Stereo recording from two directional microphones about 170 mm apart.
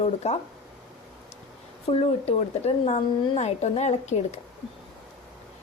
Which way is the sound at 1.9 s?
35° left (ahead or behind).